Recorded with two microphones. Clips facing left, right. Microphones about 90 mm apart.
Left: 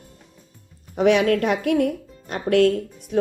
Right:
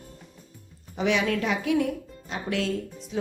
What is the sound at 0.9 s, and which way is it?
Speech, 55° left (ahead or behind).